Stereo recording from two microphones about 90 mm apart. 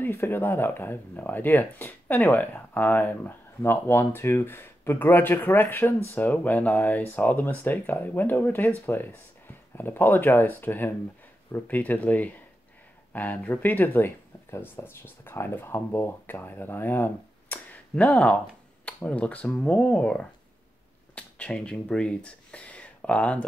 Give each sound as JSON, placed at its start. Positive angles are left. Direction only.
{"t": 0.0, "sound": "speech", "side_deg": 25}